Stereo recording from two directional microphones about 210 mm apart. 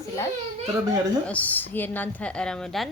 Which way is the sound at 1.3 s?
5° left (ahead or behind).